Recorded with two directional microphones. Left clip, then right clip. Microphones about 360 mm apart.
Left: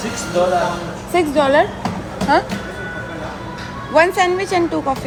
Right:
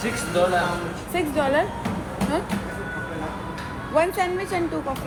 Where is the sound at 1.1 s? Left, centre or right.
Left.